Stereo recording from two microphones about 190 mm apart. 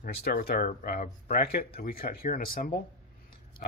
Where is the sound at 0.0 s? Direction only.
55° left (ahead or behind).